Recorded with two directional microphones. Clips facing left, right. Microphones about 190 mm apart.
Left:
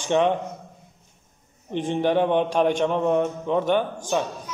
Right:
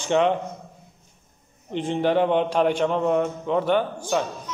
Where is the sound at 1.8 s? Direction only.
15° left (ahead or behind).